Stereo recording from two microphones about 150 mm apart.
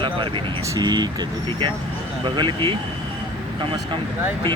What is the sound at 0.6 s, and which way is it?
Speech, 25° right (ahead or behind).